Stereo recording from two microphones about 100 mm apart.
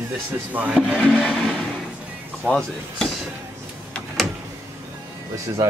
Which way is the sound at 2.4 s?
5° left (ahead or behind).